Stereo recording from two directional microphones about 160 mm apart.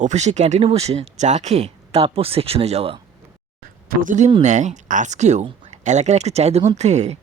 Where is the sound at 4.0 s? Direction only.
50° right (ahead or behind).